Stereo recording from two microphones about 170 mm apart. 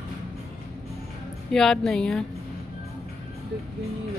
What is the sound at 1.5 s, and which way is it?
Speech, 5° left (ahead or behind).